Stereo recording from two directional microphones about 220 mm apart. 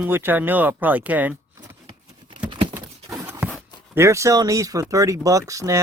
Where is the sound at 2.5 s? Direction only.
20° right (ahead or behind).